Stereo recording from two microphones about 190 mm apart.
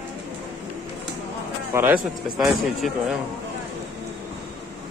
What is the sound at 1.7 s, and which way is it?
Speech, 15° right (ahead or behind).